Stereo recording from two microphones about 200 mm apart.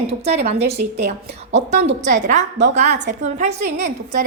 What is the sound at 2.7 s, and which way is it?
A woman's voice, 35° right (ahead or behind).